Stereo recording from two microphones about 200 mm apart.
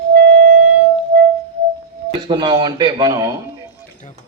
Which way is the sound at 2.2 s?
25° right (ahead or behind).